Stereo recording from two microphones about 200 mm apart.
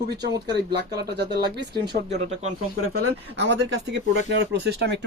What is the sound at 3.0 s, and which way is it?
Speech, 60° right (ahead or behind).